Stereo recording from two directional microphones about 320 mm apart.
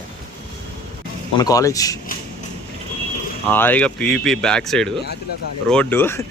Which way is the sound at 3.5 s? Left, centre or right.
Centre.